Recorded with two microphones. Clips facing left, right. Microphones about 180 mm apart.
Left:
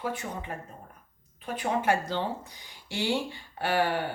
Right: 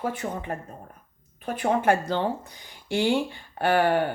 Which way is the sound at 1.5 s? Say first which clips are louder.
Right 4 dB; 50° right (ahead or behind).